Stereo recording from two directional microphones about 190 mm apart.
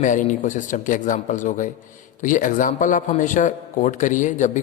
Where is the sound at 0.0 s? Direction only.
40° left (ahead or behind).